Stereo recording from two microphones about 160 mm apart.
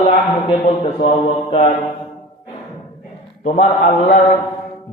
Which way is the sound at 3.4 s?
40° left (ahead or behind).